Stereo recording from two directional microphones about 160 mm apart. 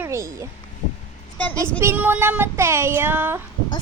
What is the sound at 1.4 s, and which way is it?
Speech, 10° left (ahead or behind).